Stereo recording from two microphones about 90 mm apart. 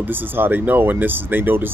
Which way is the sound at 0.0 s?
20° right (ahead or behind).